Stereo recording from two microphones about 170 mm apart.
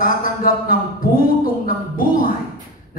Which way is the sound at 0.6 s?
55° left (ahead or behind).